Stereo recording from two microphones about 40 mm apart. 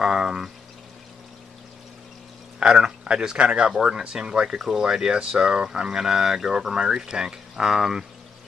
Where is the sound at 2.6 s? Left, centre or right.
Right.